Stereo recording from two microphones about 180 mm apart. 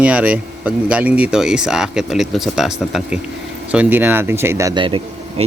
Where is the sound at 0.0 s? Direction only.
5° right (ahead or behind).